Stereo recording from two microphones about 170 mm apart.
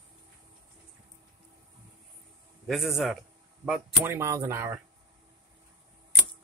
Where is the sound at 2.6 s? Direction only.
Centre (ahead or behind).